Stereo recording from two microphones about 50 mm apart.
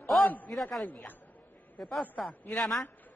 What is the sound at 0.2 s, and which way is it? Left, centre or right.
Speech, left.